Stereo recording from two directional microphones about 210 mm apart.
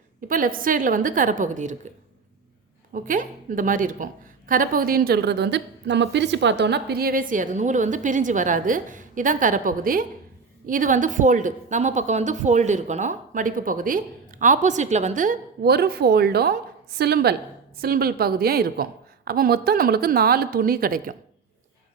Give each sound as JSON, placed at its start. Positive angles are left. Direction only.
{"t": 0.3, "sound": "a woman's voice", "side_deg": -40}
{"t": 2.9, "sound": "a woman's voice", "side_deg": -40}